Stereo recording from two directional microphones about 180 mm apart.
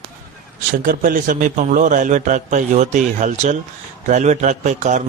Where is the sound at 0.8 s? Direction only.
50° right (ahead or behind).